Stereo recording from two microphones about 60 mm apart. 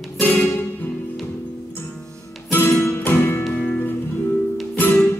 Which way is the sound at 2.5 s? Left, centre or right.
Left.